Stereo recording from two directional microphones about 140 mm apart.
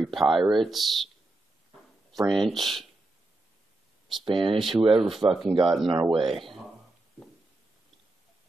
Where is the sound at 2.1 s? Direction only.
Centre (ahead or behind).